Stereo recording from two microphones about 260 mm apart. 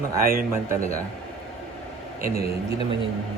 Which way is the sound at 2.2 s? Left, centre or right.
Right.